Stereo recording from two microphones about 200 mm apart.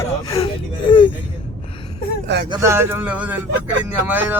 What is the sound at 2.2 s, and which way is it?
Speech, 60° right (ahead or behind).